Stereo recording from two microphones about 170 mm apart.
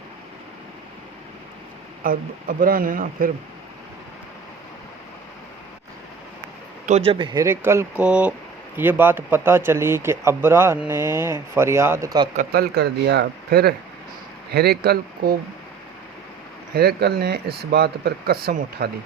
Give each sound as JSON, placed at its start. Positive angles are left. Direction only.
{"t": 2.0, "sound": "speech", "side_deg": -55}
{"t": 6.8, "sound": "speech", "side_deg": -40}
{"t": 12.5, "sound": "speech", "side_deg": -70}
{"t": 16.7, "sound": "speech", "side_deg": -70}